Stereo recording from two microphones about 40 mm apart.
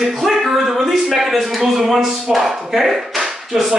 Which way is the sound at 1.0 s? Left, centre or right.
Centre.